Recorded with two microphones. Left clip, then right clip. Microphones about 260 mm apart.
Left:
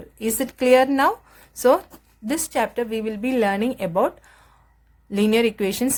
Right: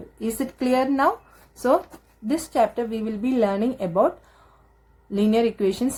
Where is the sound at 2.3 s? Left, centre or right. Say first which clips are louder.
Right 2 dB; left.